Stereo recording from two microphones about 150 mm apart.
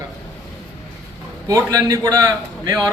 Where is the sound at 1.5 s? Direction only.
20° right (ahead or behind).